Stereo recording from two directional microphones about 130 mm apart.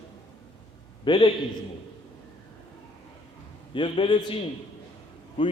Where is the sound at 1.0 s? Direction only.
40° left (ahead or behind).